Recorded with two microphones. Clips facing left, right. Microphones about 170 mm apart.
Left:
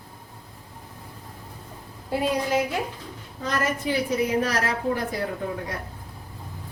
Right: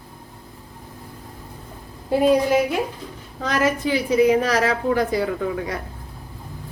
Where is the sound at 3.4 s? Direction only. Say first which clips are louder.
Right 5 dB; 90° right.